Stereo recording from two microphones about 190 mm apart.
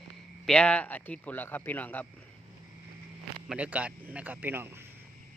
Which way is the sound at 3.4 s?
5° right (ahead or behind).